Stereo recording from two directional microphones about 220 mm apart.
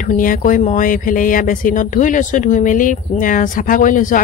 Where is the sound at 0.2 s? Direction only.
40° left (ahead or behind).